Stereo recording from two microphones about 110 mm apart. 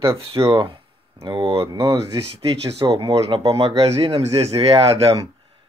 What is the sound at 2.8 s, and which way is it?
Speech, 35° right (ahead or behind).